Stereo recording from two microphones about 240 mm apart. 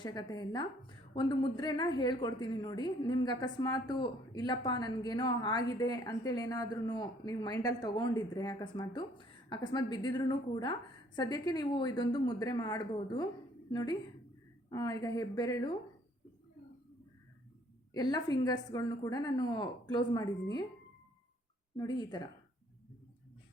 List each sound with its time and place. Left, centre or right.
0.0 s a woman's voice: centre
17.9 s a woman's voice: centre
21.8 s a woman's voice: centre